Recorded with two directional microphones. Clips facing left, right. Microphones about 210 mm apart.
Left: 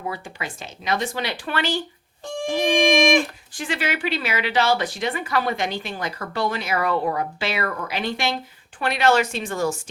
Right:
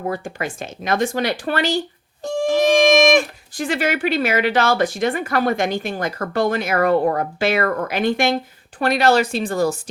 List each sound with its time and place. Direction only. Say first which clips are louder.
0.0 s speech: right 6 dB; 50° right (ahead or behind)
8.8 s speech: right 3 dB; 40° right (ahead or behind)